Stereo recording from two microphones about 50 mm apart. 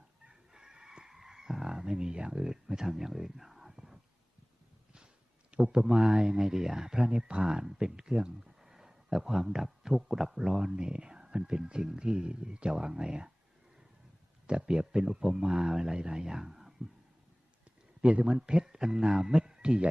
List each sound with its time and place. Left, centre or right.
0.3 s chicken: centre
5.5 s speech: right
14.4 s speech: centre
18.0 s speech: right